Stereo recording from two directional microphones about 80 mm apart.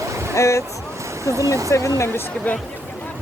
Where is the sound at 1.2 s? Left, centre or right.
Right.